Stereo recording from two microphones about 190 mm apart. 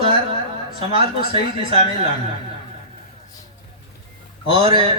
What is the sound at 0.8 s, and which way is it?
Speech, 30° right (ahead or behind).